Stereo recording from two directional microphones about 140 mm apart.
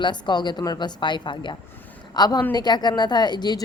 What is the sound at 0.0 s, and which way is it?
A woman's voice, 30° left (ahead or behind).